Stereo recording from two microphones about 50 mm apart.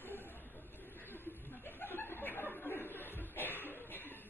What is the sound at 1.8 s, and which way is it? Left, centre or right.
Chuckle, left.